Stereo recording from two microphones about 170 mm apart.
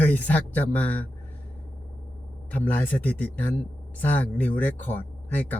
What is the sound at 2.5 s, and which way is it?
A man's voice, 10° left (ahead or behind).